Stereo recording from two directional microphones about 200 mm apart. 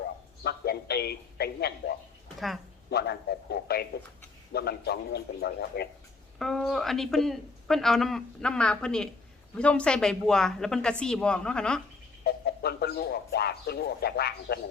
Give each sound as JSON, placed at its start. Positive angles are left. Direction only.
{"t": 0.4, "sound": "a man's voice", "side_deg": 55}
{"t": 6.4, "sound": "speech", "side_deg": 0}
{"t": 12.2, "sound": "speech", "side_deg": 55}